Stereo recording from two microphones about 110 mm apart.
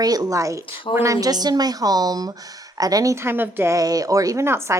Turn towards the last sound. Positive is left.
turn(degrees=-25)  # may be behind; listen again after turning